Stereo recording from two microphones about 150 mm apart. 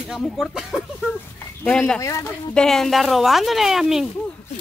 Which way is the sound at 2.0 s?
20° left (ahead or behind).